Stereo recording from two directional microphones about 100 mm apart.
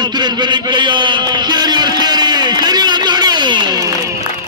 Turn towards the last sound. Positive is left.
turn(degrees=-35)  # may be behind; listen again after turning